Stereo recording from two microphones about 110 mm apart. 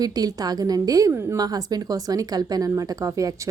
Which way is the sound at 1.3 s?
35° right (ahead or behind).